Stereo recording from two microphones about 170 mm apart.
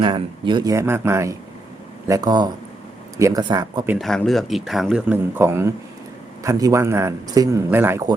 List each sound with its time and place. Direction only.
0.0 s a man's voice: 30° right (ahead or behind)
3.9 s a man's voice: centre (ahead or behind); by 8.0 s 15° right (ahead or behind)